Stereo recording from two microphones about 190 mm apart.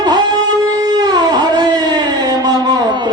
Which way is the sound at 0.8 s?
20° right (ahead or behind).